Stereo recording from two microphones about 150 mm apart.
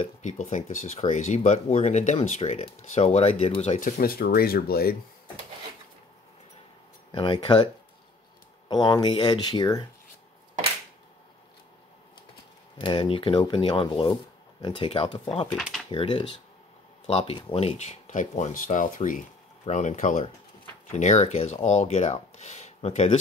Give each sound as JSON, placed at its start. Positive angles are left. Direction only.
{"t": 0.0, "sound": "speech", "side_deg": 55}
{"t": 3.8, "sound": "speech", "side_deg": 80}
{"t": 7.1, "sound": "speech", "side_deg": 35}
{"t": 12.7, "sound": "speech", "side_deg": 35}
{"t": 15.5, "sound": "speech", "side_deg": 0}
{"t": 15.9, "sound": "speech", "side_deg": 35}